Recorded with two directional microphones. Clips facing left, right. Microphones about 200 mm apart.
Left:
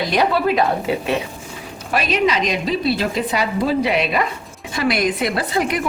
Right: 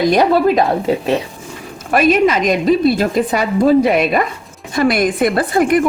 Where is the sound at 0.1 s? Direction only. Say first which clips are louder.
Right 6 dB; 45° right (ahead or behind).